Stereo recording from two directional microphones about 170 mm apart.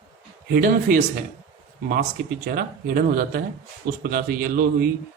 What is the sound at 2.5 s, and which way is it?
Speech, 55° right (ahead or behind).